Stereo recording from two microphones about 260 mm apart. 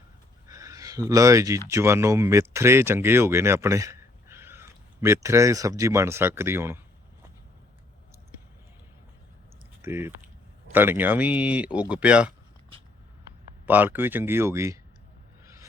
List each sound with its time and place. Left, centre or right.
0.4 s speech: centre
9.8 s speech: centre
13.7 s speech: centre